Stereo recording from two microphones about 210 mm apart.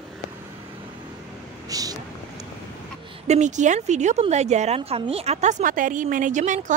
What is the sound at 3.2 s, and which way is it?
A woman's voice, 35° right (ahead or behind).